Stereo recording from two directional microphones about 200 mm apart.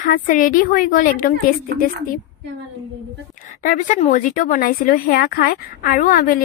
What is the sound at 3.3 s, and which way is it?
Speech, 40° left (ahead or behind).